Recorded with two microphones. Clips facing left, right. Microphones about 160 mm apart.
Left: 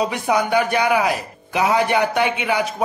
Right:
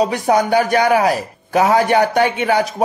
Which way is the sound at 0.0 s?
40° right (ahead or behind).